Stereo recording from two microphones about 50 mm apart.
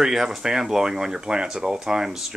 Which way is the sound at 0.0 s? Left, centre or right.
Centre.